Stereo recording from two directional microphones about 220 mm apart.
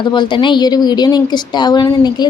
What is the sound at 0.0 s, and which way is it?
A woman's voice, 20° left (ahead or behind).